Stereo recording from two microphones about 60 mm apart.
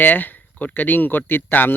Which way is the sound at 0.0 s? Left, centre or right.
Left.